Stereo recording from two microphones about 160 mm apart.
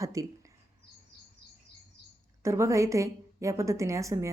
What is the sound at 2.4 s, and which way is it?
A woman's voice, 20° right (ahead or behind).